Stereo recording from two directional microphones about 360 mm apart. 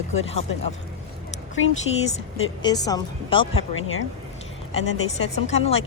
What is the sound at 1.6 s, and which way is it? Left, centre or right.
Speech, left.